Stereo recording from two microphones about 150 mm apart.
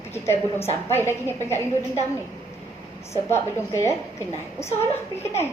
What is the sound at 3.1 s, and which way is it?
A woman's voice, 15° left (ahead or behind).